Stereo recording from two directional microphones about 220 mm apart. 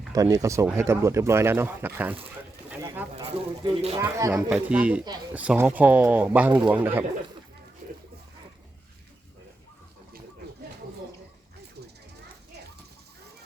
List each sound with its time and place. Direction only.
0.1 s speech: 15° right (ahead or behind)
3.6 s speech: 30° right (ahead or behind)
3.9 s speech: 10° right (ahead or behind)